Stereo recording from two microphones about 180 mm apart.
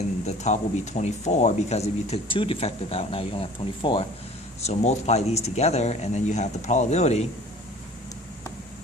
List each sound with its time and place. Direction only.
0.3 s speech: 40° left (ahead or behind)